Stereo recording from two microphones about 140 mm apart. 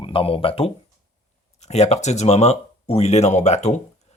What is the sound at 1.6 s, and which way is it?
Speech, 55° left (ahead or behind).